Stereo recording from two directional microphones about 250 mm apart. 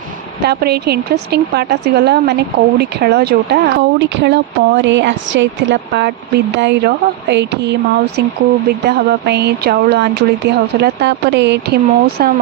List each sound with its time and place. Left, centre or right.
0.4 s speech: right